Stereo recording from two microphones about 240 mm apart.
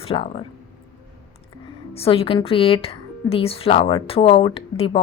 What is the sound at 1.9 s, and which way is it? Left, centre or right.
A woman's voice, left.